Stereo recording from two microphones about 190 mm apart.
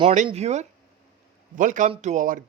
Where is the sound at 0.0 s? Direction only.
40° right (ahead or behind).